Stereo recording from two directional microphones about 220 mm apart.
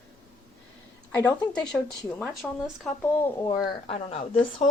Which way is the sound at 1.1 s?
5° left (ahead or behind).